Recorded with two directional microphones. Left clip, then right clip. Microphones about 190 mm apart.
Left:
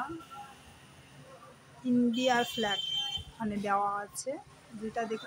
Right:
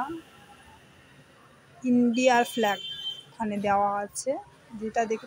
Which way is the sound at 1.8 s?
25° right (ahead or behind).